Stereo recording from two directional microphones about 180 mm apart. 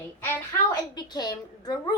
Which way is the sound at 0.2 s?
15° left (ahead or behind).